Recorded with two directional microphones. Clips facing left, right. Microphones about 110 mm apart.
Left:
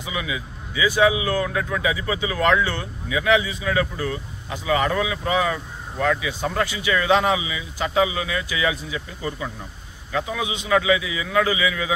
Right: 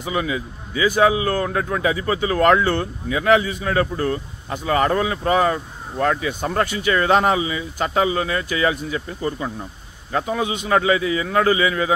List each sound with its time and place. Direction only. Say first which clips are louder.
0.0 s a man's voice: right 5 dB; 40° right (ahead or behind)